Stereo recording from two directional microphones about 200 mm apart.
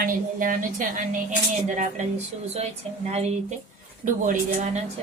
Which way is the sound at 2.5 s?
30° right (ahead or behind).